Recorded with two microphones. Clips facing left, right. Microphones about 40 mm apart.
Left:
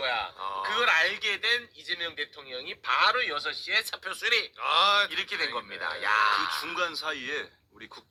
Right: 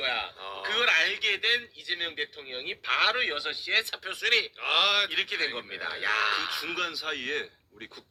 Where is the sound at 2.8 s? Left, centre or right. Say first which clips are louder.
Left 2 dB; right.